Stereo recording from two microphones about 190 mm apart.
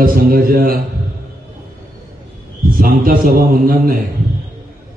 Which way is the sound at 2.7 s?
50° right (ahead or behind).